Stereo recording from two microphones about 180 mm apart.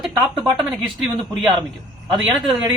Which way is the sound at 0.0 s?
Centre (ahead or behind).